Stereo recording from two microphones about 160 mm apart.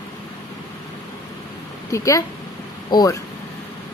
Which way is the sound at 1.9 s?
20° left (ahead or behind).